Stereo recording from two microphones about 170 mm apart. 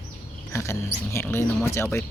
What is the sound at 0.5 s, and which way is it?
Speech, 15° left (ahead or behind).